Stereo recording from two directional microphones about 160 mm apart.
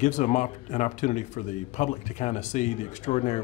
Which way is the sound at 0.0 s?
50° left (ahead or behind).